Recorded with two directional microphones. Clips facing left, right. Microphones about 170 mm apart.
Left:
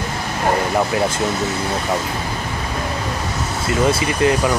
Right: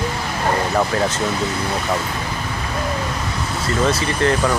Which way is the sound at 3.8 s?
10° left (ahead or behind).